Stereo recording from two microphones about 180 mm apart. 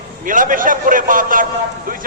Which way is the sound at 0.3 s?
50° right (ahead or behind).